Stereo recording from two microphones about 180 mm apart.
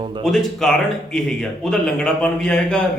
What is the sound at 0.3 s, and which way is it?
Speech, centre (ahead or behind).